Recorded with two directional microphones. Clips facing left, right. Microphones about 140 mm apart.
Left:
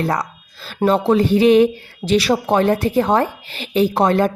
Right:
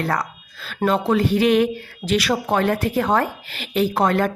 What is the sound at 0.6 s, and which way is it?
Speech, 30° left (ahead or behind).